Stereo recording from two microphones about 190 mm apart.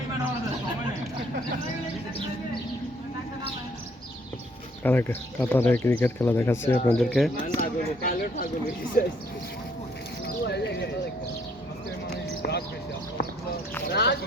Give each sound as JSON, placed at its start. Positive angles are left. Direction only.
{"t": 4.8, "sound": "speech", "side_deg": 10}
{"t": 7.4, "sound": "speech", "side_deg": 45}
{"t": 10.2, "sound": "horse", "side_deg": 60}
{"t": 12.1, "sound": "a sound", "side_deg": 60}
{"t": 13.8, "sound": "speech", "side_deg": 60}